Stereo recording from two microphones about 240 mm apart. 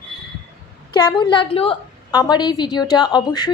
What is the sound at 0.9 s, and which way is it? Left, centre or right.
A woman's voice, centre.